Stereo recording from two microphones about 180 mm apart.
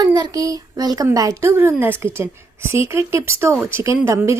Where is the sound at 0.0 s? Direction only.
20° right (ahead or behind).